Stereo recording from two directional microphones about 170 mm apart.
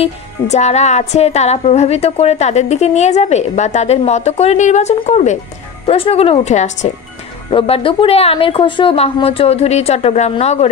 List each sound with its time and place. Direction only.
0.0 s speech: 40° left (ahead or behind)
7.5 s speech: 35° left (ahead or behind)